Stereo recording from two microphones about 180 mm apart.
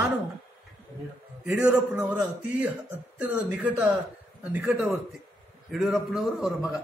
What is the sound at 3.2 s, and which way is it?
A man's voice, 5° right (ahead or behind).